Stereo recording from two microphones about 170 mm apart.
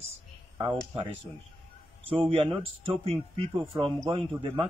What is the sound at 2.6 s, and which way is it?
A man's voice, 35° right (ahead or behind).